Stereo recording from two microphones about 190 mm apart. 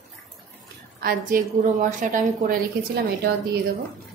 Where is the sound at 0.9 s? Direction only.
50° right (ahead or behind).